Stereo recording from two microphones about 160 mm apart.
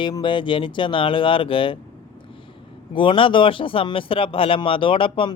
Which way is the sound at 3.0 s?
30° left (ahead or behind).